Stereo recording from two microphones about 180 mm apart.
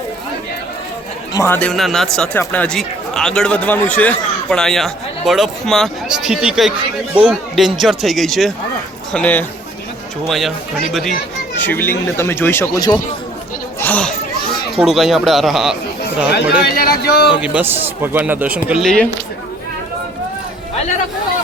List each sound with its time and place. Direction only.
1.3 s speech: 15° left (ahead or behind)
11.6 s speech: 10° left (ahead or behind)
13.7 s chatter: 10° left (ahead or behind)
14.8 s speech: centre (ahead or behind)
16.6 s speech: 55° left (ahead or behind)
17.4 s speech: 10° right (ahead or behind)